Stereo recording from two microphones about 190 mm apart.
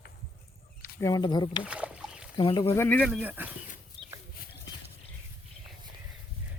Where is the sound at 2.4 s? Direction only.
25° left (ahead or behind).